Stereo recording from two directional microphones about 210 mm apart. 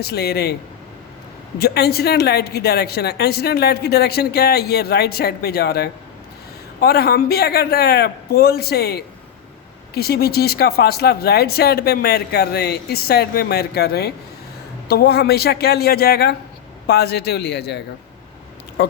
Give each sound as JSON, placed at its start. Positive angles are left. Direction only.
{"t": 0.0, "sound": "a woman's voice", "side_deg": 50}
{"t": 1.5, "sound": "a woman's voice", "side_deg": 50}